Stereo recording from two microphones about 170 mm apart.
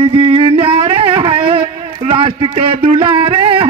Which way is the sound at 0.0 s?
30° right (ahead or behind).